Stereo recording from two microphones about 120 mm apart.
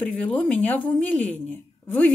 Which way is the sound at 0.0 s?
10° left (ahead or behind).